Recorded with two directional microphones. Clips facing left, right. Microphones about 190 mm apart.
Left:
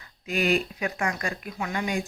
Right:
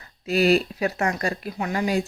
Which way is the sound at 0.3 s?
35° right (ahead or behind).